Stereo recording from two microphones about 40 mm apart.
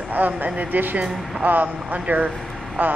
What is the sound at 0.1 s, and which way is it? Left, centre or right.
Speech, right.